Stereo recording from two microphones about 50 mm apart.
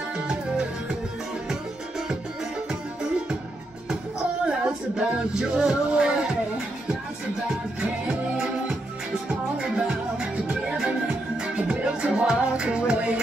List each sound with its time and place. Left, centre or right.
1.5 s music: centre
4.5 s music: centre
7.4 s music: right